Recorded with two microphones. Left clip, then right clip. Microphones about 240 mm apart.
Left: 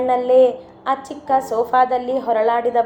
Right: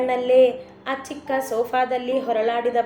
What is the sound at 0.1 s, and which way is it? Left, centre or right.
Speech, centre.